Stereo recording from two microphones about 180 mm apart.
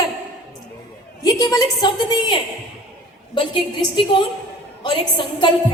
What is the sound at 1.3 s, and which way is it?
A woman's voice, 20° left (ahead or behind).